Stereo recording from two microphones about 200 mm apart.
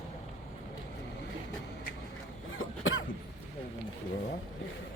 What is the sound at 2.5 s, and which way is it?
Cough, 85° left.